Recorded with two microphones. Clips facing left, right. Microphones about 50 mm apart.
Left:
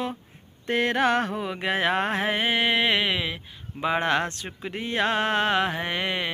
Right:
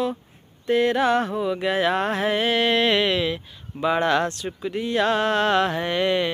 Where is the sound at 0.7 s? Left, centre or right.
Left.